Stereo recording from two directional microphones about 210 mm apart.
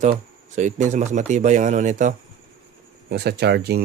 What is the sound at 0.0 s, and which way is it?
Speech, 35° right (ahead or behind).